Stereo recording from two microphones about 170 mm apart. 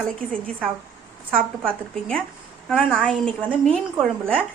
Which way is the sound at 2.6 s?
5° left (ahead or behind).